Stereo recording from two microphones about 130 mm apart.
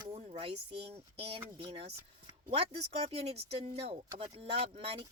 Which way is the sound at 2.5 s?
50° right (ahead or behind).